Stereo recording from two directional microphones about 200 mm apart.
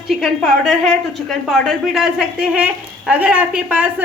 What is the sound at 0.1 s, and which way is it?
A woman's voice, centre (ahead or behind).